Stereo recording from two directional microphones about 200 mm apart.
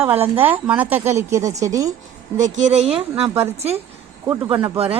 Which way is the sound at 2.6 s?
35° right (ahead or behind).